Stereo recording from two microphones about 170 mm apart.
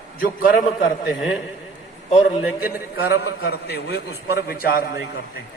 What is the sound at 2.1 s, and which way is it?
Speech, 40° left (ahead or behind).